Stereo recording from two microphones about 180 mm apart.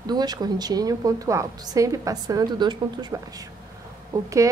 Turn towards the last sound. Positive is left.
turn(degrees=-15)  # may be behind; listen again after turning